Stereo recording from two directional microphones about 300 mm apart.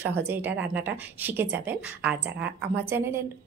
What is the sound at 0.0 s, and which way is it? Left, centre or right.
A woman's voice, centre.